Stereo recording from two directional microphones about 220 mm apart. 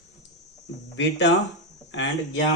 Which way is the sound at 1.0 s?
55° left (ahead or behind).